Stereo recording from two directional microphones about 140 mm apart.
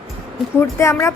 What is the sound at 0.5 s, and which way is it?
Speech, 20° left (ahead or behind).